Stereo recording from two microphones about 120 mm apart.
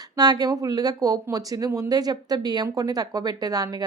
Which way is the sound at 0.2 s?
35° right (ahead or behind).